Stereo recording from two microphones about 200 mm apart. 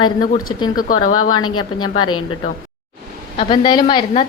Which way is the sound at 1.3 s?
90° left.